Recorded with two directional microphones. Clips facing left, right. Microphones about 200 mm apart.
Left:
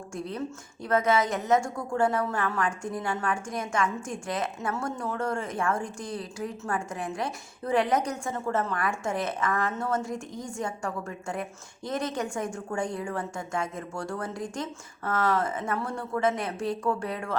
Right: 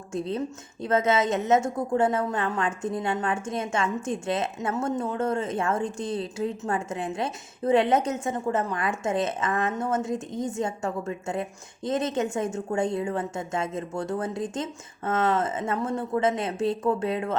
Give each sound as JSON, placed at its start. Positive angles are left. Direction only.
{"t": 0.1, "sound": "a woman's voice", "side_deg": -25}